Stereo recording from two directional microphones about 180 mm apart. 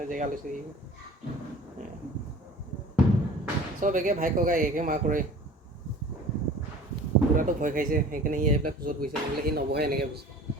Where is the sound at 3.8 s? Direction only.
45° right (ahead or behind).